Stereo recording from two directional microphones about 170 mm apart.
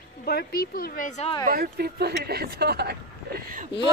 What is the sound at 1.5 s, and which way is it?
Speech, 65° right (ahead or behind).